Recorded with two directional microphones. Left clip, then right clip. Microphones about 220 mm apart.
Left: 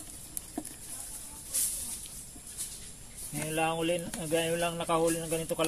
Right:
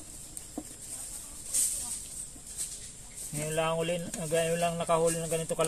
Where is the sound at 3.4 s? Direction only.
30° right (ahead or behind).